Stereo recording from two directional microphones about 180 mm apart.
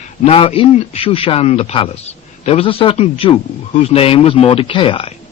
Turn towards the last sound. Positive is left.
turn(degrees=30)  # may be behind; listen again after turning